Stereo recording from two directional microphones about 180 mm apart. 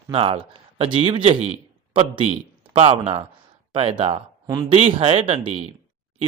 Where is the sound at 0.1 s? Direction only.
30° right (ahead or behind).